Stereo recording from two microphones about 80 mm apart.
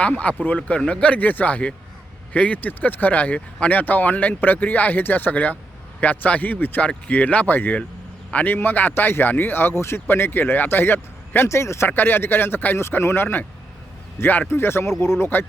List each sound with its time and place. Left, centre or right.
0.0 s a man's voice: centre